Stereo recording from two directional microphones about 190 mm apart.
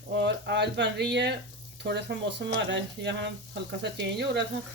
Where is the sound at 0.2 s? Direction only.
65° right (ahead or behind).